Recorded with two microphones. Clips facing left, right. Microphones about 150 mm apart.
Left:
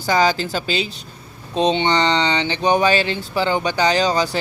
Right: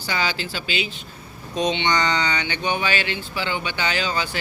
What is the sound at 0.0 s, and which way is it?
Speech, 40° left (ahead or behind).